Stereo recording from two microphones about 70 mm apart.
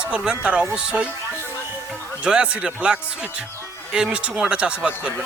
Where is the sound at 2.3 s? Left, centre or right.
Centre.